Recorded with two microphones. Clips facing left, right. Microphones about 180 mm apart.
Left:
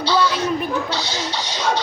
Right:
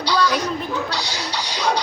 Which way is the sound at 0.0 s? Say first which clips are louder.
Left 1 dB; 15° right (ahead or behind).